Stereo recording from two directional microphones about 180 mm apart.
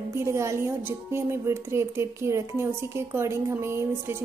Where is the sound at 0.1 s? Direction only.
15° right (ahead or behind).